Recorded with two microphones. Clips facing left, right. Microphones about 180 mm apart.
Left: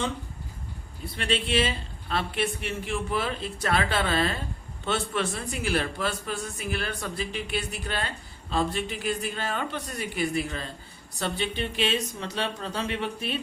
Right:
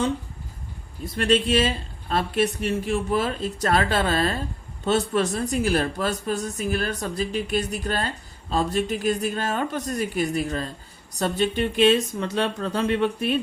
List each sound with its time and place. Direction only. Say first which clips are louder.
1.0 s speech: right 8 dB; 45° right (ahead or behind)